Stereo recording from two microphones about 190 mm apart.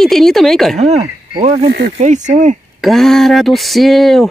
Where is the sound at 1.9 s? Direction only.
40° right (ahead or behind).